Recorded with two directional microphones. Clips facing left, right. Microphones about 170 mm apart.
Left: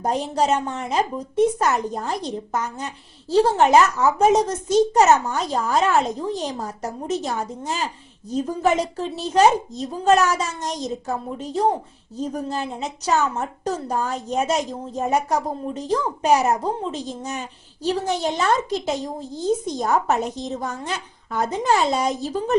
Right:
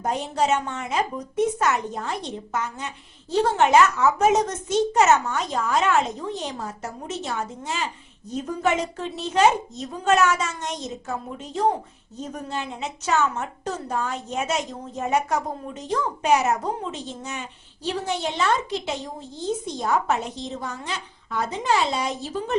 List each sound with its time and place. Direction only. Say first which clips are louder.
0.0 s a woman's voice: left 3 dB; 35° left (ahead or behind)